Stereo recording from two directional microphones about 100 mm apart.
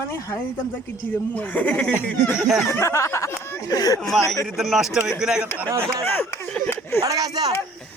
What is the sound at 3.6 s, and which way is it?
Speech, 40° left (ahead or behind).